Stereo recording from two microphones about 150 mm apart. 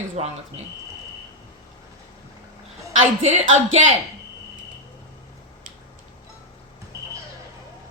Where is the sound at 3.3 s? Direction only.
50° right (ahead or behind).